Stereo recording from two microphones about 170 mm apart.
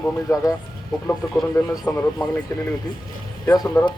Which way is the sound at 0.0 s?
20° left (ahead or behind).